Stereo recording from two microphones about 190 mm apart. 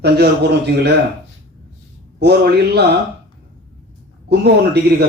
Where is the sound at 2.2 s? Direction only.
60° right (ahead or behind).